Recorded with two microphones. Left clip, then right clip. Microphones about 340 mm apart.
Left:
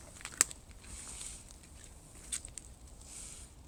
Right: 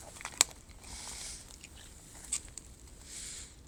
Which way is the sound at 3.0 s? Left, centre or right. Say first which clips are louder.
Right 6 dB; centre.